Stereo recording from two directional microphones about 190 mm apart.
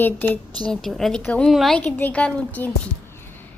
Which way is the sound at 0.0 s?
10° left (ahead or behind).